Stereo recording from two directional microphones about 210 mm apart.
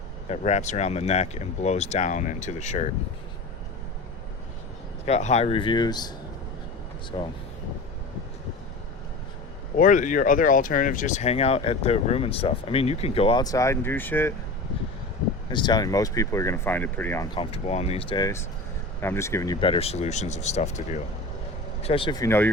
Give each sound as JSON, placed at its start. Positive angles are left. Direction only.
{"t": 0.3, "sound": "speech", "side_deg": 35}
{"t": 5.0, "sound": "speech", "side_deg": 30}
{"t": 7.1, "sound": "speech", "side_deg": 20}
{"t": 9.7, "sound": "speech", "side_deg": 40}
{"t": 15.4, "sound": "speech", "side_deg": 20}
{"t": 17.3, "sound": "speech", "side_deg": 25}